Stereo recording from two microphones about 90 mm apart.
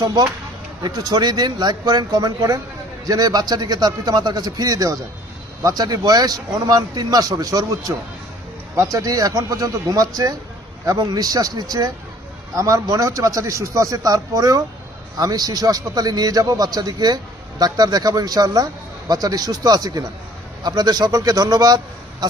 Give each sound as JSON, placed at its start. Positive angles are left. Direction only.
{"t": 0.0, "sound": "a man's voice", "side_deg": -45}